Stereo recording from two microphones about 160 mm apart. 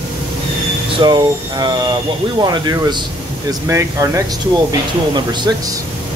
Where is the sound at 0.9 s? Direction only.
25° right (ahead or behind).